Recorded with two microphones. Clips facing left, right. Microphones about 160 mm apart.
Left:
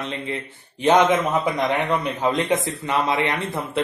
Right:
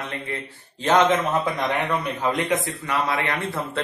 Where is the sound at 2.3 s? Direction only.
25° left (ahead or behind).